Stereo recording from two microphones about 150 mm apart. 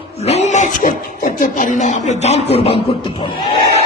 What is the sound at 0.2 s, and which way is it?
Speech, 45° left (ahead or behind).